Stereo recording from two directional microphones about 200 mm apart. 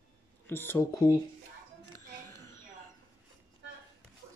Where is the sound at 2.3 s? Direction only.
15° left (ahead or behind).